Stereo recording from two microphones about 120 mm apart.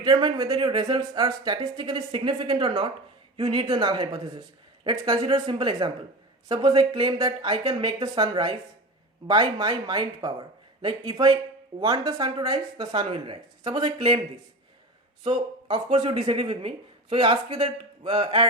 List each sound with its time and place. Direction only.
0.0 s speech: 35° right (ahead or behind)
5.3 s speech: 40° right (ahead or behind)